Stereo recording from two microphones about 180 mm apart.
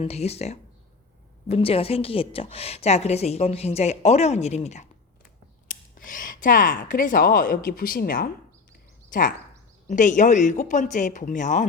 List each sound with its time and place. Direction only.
0.0 s a woman's voice: 35° left (ahead or behind); by 8.3 s 55° left (ahead or behind)
9.9 s speech: 45° left (ahead or behind)